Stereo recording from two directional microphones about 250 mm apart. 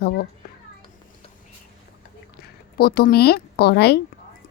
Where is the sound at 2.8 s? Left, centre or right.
Left.